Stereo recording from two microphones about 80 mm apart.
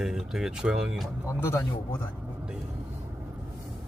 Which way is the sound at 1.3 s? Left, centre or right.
Left.